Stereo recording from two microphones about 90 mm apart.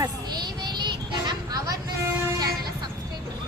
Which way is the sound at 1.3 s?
45° right (ahead or behind).